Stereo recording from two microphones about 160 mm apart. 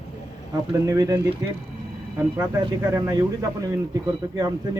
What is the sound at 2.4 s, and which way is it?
Speech, 20° right (ahead or behind).